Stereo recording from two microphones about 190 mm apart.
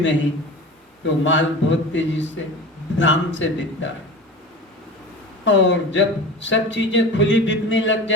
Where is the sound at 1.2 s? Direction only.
75° left (ahead or behind).